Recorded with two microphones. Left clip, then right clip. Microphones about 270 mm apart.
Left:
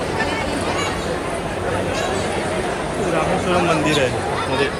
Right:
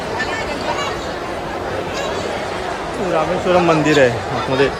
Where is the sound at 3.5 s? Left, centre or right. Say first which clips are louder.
Right 6 dB; right.